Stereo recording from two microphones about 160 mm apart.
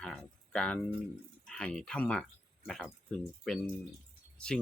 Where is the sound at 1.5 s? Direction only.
5° left (ahead or behind).